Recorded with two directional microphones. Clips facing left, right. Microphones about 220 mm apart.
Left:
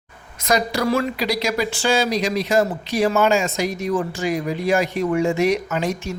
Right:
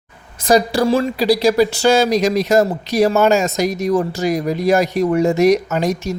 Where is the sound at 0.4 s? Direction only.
30° right (ahead or behind).